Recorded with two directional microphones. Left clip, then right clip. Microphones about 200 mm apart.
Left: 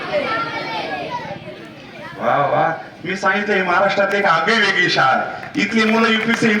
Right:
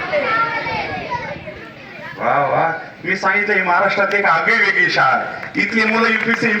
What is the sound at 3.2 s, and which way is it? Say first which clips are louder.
A man's voice: right 1 dB; 20° left (ahead or behind).